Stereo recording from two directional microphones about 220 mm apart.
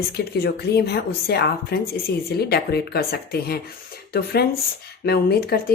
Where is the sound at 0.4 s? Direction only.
45° left (ahead or behind).